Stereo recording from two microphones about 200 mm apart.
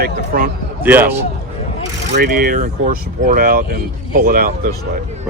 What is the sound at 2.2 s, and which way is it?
Speech, 45° right (ahead or behind).